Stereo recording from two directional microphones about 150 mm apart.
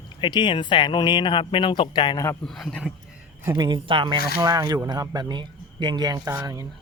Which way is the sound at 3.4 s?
25° right (ahead or behind).